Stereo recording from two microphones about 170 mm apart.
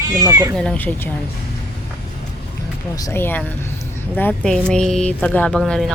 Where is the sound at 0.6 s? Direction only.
10° left (ahead or behind).